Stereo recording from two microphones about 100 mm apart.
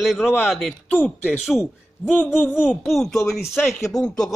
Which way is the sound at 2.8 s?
5° left (ahead or behind).